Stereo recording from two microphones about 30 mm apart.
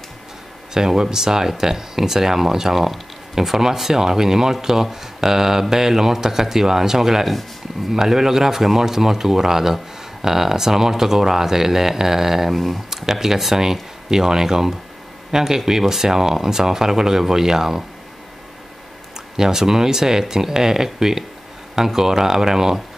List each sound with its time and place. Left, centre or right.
0.7 s speech: centre
12.9 s speech: centre
19.3 s speech: centre